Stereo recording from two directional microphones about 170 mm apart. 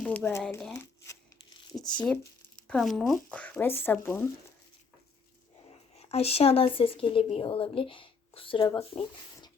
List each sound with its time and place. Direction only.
0.0 s speech: 10° left (ahead or behind)
1.7 s speech: centre (ahead or behind)
5.6 s speech: 35° left (ahead or behind)